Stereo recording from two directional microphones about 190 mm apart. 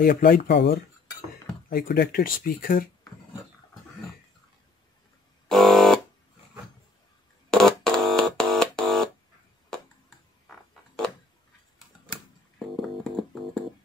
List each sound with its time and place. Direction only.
0.0 s speech: 50° left (ahead or behind)
1.7 s speech: 50° left (ahead or behind)
5.5 s buzzer: centre (ahead or behind)
7.5 s a sound: 5° left (ahead or behind)
12.5 s music: centre (ahead or behind)